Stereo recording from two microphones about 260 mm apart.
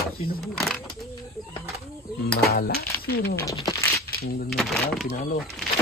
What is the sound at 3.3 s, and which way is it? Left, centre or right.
Speech, centre.